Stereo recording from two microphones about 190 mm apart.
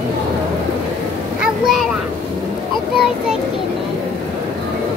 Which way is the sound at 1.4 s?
Centre (ahead or behind).